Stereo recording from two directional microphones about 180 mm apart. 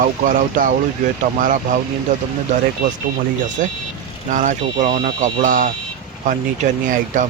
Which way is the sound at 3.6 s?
45° right (ahead or behind).